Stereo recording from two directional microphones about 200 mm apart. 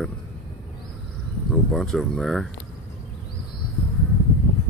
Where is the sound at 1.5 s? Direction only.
Centre (ahead or behind).